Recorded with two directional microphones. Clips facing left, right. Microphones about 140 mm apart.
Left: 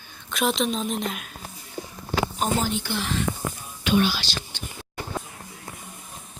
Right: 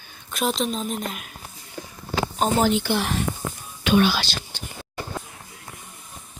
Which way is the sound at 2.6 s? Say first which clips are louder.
Right 6 dB; 75° right (ahead or behind).